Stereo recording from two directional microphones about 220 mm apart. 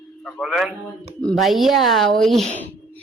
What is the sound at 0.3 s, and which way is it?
Speech, centre (ahead or behind).